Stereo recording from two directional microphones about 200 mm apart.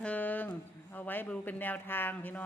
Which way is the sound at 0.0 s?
5° left (ahead or behind).